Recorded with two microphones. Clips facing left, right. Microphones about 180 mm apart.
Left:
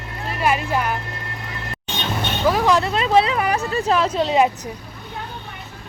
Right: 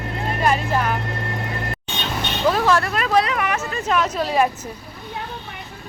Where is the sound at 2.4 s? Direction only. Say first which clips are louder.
Left 1 dB; 15° left (ahead or behind).